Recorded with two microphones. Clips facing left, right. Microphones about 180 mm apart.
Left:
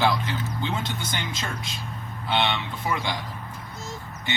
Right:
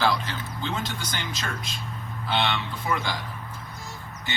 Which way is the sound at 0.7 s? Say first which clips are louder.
Left 1 dB; 25° left (ahead or behind).